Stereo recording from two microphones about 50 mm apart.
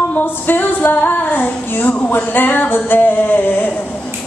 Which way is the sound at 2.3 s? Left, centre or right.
Left.